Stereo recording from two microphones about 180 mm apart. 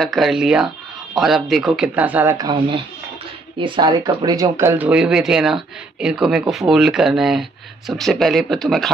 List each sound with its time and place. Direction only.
0.0 s speech: centre (ahead or behind)
2.3 s speech: 25° right (ahead or behind); by 8.9 s centre (ahead or behind)